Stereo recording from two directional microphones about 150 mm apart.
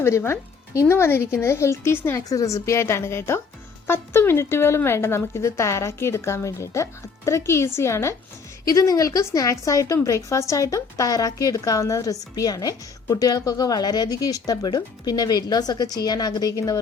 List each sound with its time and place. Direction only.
0.0 s a woman's voice: 20° left (ahead or behind)